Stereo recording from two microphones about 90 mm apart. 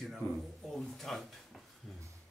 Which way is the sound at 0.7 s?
5° left (ahead or behind).